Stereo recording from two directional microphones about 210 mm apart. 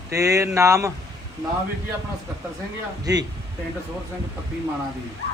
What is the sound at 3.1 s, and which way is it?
Speech, 15° right (ahead or behind).